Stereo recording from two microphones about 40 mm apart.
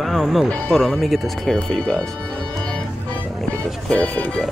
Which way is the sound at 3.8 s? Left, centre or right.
Centre.